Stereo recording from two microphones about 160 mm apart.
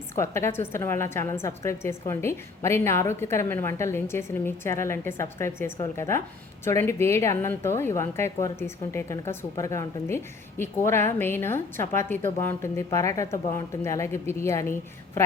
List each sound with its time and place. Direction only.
0.2 s a woman's voice: 15° left (ahead or behind)